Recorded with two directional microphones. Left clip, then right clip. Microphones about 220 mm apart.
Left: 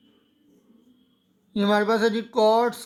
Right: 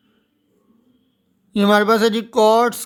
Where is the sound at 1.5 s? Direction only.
40° right (ahead or behind).